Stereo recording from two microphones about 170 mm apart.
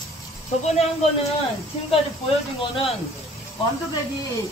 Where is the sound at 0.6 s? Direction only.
35° left (ahead or behind).